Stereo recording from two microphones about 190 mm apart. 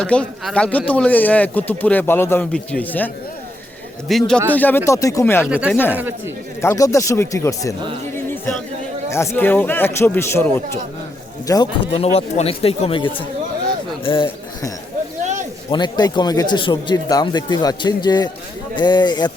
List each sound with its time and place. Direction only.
0.0 s speech: 5° left (ahead or behind)
4.1 s speech: centre (ahead or behind)
5.5 s speech: 5° right (ahead or behind)
6.6 s speech: 15° left (ahead or behind)
9.0 s speech: 15° left (ahead or behind)
15.2 s a sound: 40° right (ahead or behind)
15.7 s speech: 20° left (ahead or behind)